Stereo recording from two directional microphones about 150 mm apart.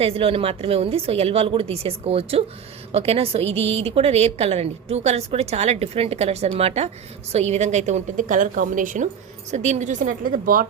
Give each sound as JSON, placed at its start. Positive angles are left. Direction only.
{"t": 0.0, "sound": "a woman's voice", "side_deg": -40}
{"t": 9.5, "sound": "a woman's voice", "side_deg": -50}